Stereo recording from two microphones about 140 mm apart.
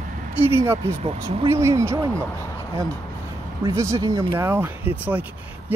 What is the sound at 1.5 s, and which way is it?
Speech, 20° right (ahead or behind).